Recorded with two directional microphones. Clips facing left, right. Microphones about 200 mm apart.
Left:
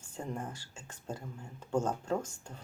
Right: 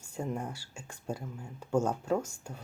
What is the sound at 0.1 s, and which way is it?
Speech, 10° right (ahead or behind).